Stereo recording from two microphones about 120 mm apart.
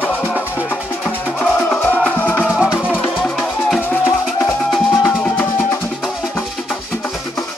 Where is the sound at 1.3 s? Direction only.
10° left (ahead or behind).